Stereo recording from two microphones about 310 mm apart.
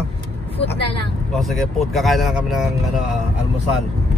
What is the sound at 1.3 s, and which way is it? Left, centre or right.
Speech, centre.